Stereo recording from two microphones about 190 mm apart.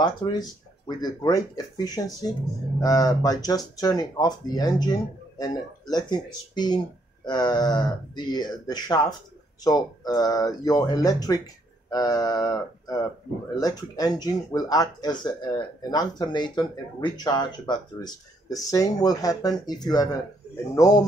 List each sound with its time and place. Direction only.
0.0 s speech: 20° left (ahead or behind)